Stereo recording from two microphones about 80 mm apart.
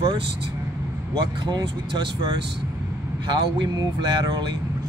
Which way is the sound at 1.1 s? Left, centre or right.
Right.